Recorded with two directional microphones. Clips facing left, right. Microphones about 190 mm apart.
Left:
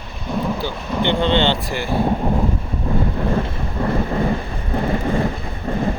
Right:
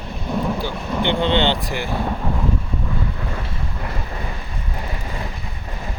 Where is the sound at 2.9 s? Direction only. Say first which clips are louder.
Left 8 dB; 45° left (ahead or behind).